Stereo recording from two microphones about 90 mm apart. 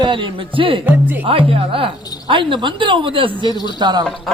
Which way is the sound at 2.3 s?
65° right (ahead or behind).